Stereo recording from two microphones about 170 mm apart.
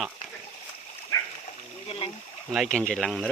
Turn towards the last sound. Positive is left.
turn(degrees=5)  # may be behind; listen again after turning